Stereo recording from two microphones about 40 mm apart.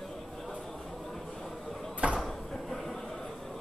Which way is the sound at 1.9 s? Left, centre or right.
Right.